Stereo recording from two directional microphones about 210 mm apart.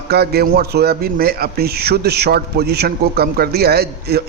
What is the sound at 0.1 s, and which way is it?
A man's voice, 50° right (ahead or behind).